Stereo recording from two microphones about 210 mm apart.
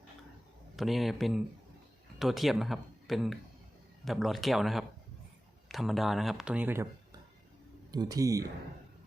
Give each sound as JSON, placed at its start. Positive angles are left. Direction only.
{"t": 0.8, "sound": "speech", "side_deg": 0}